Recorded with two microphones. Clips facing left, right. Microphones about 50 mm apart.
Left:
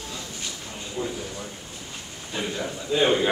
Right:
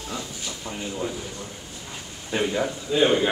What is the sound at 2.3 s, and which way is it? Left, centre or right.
Speech, right.